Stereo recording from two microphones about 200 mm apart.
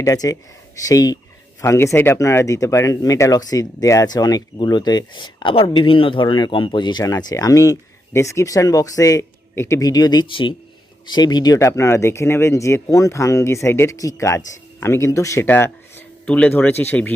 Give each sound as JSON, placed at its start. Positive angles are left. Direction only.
{"t": 0.0, "sound": "speech", "side_deg": 15}